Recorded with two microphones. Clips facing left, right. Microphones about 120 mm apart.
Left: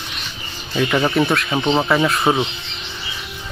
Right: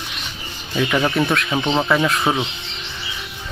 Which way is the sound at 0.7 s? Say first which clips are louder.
Left 1 dB; 5° left (ahead or behind).